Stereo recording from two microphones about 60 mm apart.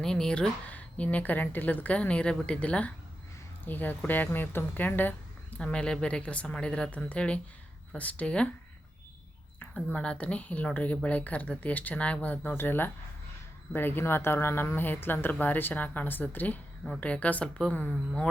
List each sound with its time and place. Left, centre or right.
0.0 s a woman's voice: centre
0.7 s speech: left
5.5 s a woman's voice: centre
9.7 s speech: centre